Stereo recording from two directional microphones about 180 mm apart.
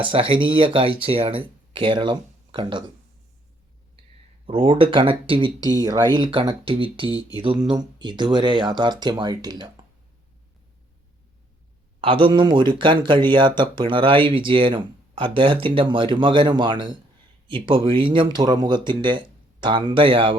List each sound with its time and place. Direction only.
0.0 s speech: 30° right (ahead or behind)
4.4 s speech: 30° right (ahead or behind)
7.1 s speech: 20° left (ahead or behind)
7.3 s speech: 25° right (ahead or behind)
11.9 s speech: 30° right (ahead or behind)